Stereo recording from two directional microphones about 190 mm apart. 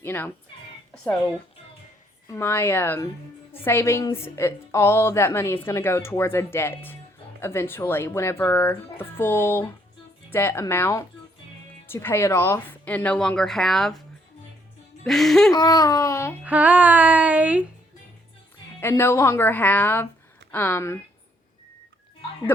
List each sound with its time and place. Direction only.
0.0 s speech: 10° left (ahead or behind)
2.2 s a woman's voice: 10° left (ahead or behind)
15.0 s speech: centre (ahead or behind)
15.5 s speech: 20° left (ahead or behind)
16.4 s speech: 10° right (ahead or behind)
18.8 s a woman's voice: 15° left (ahead or behind)